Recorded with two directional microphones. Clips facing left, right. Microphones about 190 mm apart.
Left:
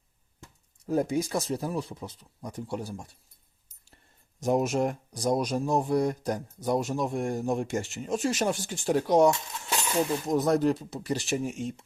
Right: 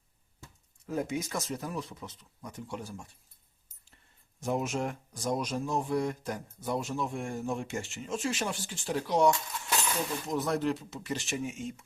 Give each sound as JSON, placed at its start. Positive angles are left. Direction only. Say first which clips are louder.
{"t": 0.9, "sound": "speech", "louder": "left 6 dB", "side_deg": 35}